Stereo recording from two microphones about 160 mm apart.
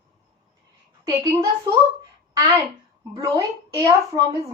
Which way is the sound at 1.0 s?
20° right (ahead or behind).